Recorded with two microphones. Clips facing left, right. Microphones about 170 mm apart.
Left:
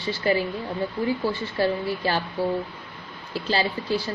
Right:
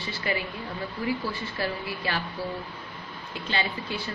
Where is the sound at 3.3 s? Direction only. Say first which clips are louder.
Left 6 dB; 35° left (ahead or behind).